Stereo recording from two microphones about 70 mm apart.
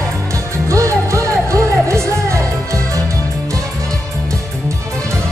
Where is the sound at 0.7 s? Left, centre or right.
Right.